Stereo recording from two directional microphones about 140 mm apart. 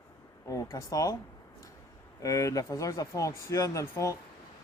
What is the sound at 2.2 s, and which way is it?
Speech, 25° left (ahead or behind).